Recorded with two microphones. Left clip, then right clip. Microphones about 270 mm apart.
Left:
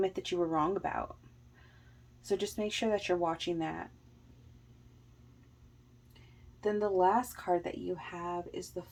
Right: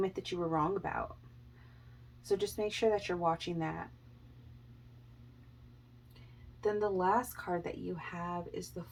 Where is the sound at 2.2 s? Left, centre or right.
Left.